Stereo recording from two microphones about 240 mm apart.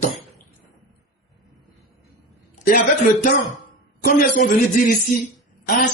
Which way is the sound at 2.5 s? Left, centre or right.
Left.